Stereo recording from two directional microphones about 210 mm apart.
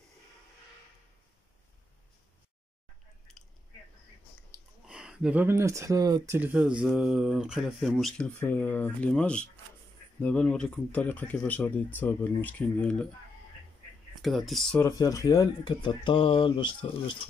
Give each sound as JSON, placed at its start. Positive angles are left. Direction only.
{"t": 4.8, "sound": "speech", "side_deg": -5}
{"t": 14.2, "sound": "speech", "side_deg": 0}
{"t": 14.8, "sound": "speech", "side_deg": 15}